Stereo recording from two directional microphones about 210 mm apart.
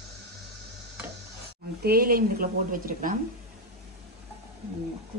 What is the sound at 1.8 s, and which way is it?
A woman's voice, 45° right (ahead or behind).